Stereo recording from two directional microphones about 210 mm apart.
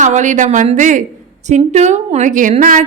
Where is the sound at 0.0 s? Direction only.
35° right (ahead or behind).